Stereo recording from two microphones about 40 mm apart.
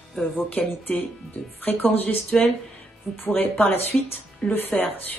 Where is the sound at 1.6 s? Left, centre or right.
Left.